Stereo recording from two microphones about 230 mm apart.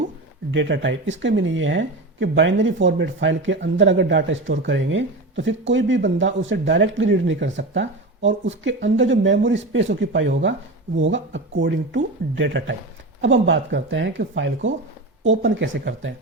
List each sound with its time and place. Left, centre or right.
0.5 s speech: right